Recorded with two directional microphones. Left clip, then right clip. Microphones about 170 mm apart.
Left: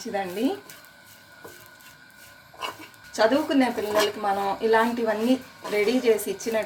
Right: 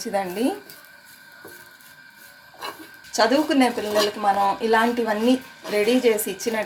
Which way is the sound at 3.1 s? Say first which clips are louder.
Right 2 dB; 45° right (ahead or behind).